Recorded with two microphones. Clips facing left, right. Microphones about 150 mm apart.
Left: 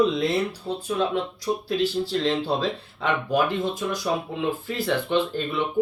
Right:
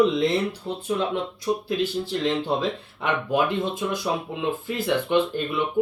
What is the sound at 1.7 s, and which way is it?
Speech, 15° right (ahead or behind).